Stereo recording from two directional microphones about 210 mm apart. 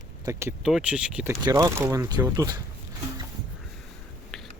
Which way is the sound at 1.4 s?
15° right (ahead or behind).